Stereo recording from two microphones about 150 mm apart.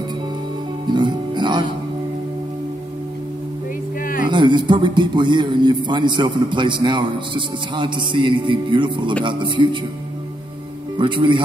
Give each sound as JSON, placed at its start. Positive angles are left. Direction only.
{"t": 0.8, "sound": "speech", "side_deg": -30}
{"t": 4.0, "sound": "a sound", "side_deg": 70}
{"t": 4.3, "sound": "a man's voice", "side_deg": -30}
{"t": 11.0, "sound": "a man's voice", "side_deg": -35}